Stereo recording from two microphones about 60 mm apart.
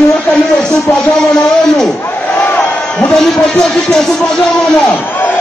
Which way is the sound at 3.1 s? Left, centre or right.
Centre.